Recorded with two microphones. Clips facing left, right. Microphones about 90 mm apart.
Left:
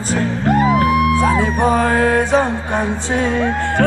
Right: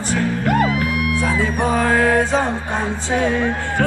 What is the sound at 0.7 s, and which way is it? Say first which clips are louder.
Music: left 7 dB; 40° left (ahead or behind).